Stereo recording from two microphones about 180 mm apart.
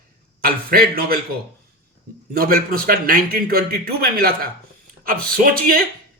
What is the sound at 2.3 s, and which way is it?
Speech, 55° right (ahead or behind).